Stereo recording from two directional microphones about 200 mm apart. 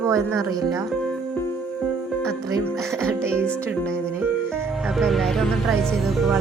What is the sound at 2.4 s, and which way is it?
Music, 15° right (ahead or behind).